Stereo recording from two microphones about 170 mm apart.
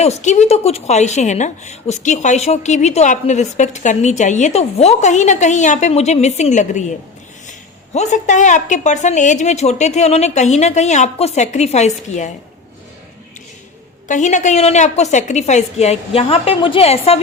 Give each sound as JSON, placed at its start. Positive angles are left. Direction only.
{"t": 0.0, "sound": "a woman's voice", "side_deg": 40}
{"t": 7.9, "sound": "a woman's voice", "side_deg": 45}
{"t": 14.1, "sound": "a woman's voice", "side_deg": 45}